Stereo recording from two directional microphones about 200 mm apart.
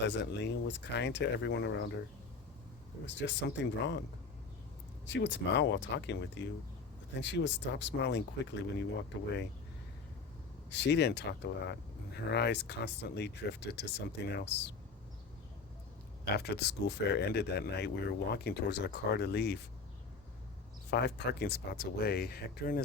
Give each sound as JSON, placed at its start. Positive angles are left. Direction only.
{"t": 0.0, "sound": "speech", "side_deg": 60}
{"t": 3.1, "sound": "speech", "side_deg": 60}
{"t": 5.0, "sound": "speech", "side_deg": 65}
{"t": 10.7, "sound": "speech", "side_deg": 60}
{"t": 16.2, "sound": "speech", "side_deg": 55}
{"t": 20.9, "sound": "speech", "side_deg": 55}